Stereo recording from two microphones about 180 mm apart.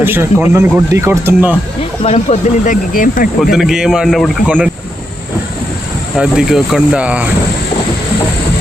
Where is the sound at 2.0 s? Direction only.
35° left (ahead or behind).